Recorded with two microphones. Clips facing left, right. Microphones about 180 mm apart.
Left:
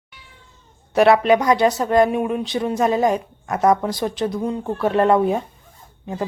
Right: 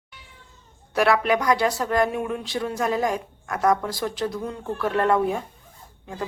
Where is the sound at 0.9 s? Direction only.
25° left (ahead or behind).